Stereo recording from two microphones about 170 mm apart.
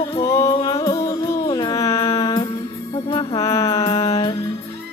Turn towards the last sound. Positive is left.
turn(degrees=20)  # may be behind; listen again after turning